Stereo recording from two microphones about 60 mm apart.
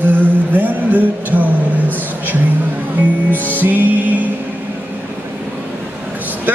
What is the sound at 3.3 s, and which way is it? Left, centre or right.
Music, right.